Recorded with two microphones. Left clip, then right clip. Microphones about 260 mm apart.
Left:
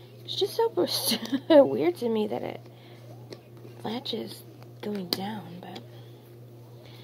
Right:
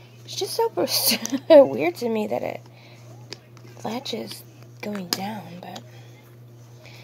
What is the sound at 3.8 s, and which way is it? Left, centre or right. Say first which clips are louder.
Speech: right 3 dB; right.